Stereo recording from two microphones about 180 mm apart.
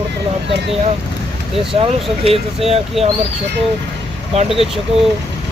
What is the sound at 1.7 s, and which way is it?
Speech, 30° right (ahead or behind).